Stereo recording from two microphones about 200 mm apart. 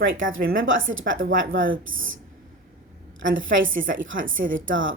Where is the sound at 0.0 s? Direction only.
70° right (ahead or behind).